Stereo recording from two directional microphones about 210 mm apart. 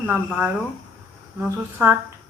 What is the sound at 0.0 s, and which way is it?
Speech, 5° right (ahead or behind).